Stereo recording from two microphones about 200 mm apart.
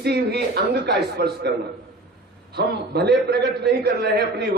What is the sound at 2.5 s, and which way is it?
A man's voice, 55° right (ahead or behind).